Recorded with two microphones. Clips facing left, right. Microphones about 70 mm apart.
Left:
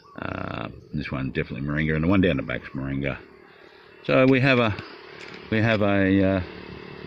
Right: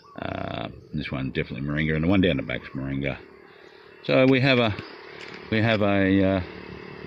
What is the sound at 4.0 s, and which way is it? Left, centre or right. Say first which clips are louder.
Speech: left 1 dB; centre.